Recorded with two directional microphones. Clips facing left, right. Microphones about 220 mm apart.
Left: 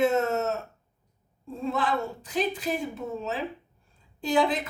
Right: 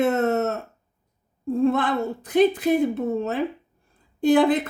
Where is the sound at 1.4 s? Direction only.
55° right (ahead or behind).